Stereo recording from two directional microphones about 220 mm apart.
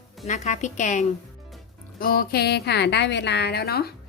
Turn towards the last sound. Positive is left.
turn(degrees=45)  # may be behind; listen again after turning